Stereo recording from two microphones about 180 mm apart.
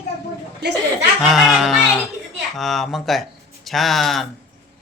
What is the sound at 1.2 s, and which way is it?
Speech, centre (ahead or behind).